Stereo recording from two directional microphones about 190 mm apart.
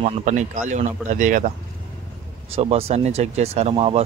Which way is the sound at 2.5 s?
30° right (ahead or behind).